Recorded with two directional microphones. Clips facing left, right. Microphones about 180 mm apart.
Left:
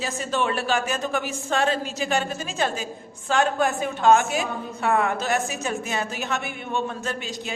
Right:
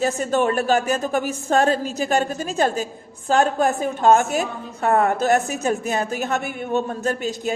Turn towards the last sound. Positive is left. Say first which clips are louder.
# right 7 dB
turn(degrees=-45)  # may be behind; listen again after turning